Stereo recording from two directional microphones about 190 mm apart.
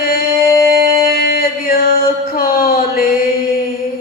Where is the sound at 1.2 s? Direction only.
50° left (ahead or behind).